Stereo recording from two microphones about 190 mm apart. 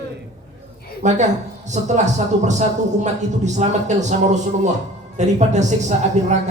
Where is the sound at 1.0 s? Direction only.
40° right (ahead or behind).